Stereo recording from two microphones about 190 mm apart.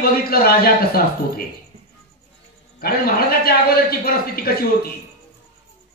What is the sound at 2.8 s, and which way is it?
A man's voice, 50° left (ahead or behind).